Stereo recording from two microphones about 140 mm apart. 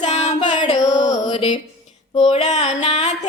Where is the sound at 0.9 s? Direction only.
60° left (ahead or behind).